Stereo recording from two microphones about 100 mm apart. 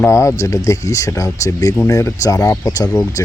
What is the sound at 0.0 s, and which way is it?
Speech, 30° left (ahead or behind).